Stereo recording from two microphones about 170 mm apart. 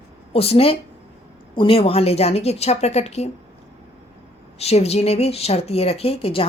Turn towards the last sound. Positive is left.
turn(degrees=35)  # may be behind; listen again after turning